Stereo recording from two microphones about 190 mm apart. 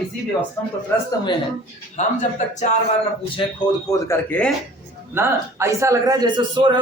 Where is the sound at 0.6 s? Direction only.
10° left (ahead or behind).